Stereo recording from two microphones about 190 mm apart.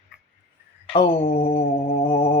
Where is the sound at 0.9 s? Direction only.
30° left (ahead or behind).